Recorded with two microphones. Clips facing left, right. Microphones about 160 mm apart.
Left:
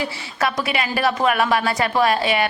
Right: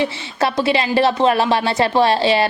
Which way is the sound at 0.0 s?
30° right (ahead or behind).